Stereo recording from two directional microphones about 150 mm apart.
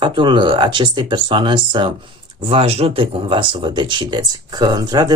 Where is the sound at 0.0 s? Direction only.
35° right (ahead or behind).